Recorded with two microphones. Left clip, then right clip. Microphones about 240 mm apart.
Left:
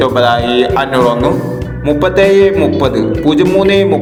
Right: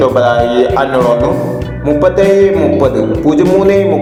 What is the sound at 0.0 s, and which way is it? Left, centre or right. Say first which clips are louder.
Music: right 1 dB; left.